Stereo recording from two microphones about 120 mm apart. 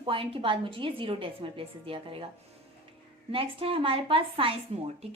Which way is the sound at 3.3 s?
50° right (ahead or behind).